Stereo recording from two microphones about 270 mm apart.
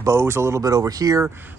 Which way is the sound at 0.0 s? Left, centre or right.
Centre.